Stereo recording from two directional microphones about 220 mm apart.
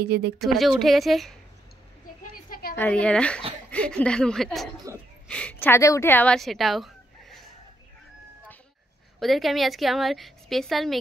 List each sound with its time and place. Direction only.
0.0 s speech: 45° right (ahead or behind)
0.4 s a woman's voice: centre (ahead or behind)
2.3 s a sound: 40° left (ahead or behind)
2.7 s a woman's voice: 5° left (ahead or behind)
4.9 s speech: 15° right (ahead or behind)
5.3 s speech: 5° left (ahead or behind)
9.2 s a woman's voice: centre (ahead or behind)